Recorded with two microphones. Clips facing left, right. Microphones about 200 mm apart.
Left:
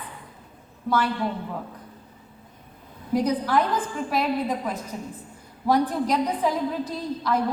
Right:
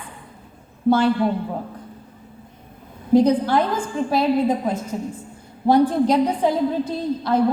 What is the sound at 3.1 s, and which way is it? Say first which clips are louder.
A woman's voice: right 7 dB; 30° right (ahead or behind).